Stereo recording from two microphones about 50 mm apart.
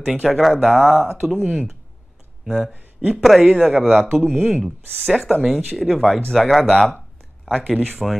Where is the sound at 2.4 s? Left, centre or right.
Centre.